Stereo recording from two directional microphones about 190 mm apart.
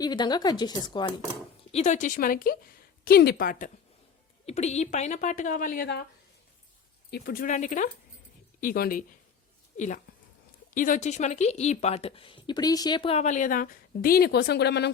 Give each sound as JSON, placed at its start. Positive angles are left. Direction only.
{"t": 0.0, "sound": "speech", "side_deg": 20}
{"t": 1.7, "sound": "speech", "side_deg": 40}
{"t": 4.4, "sound": "speech", "side_deg": 35}
{"t": 7.1, "sound": "speech", "side_deg": 50}